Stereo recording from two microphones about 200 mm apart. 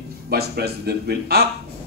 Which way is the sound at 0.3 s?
55° right (ahead or behind).